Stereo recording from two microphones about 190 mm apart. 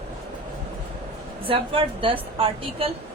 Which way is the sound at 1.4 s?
30° right (ahead or behind).